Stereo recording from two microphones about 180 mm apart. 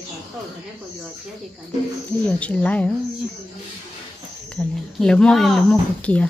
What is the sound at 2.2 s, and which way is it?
Speech, 5° left (ahead or behind).